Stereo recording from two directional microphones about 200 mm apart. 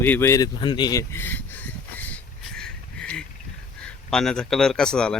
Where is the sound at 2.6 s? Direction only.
5° left (ahead or behind).